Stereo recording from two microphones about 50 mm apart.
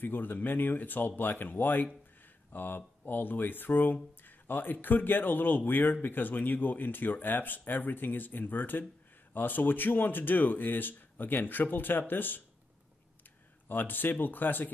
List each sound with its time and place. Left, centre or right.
0.0 s speech: left
13.7 s speech: left